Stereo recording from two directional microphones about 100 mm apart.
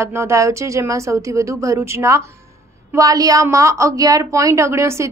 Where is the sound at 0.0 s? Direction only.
25° right (ahead or behind).